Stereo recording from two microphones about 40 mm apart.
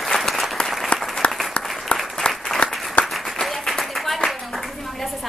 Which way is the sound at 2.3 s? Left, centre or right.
Left.